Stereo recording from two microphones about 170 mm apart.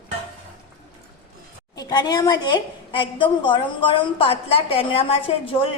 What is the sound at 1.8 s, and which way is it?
A woman's voice, 25° left (ahead or behind).